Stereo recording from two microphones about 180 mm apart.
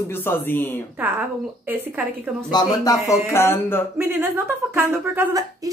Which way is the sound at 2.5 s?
20° left (ahead or behind).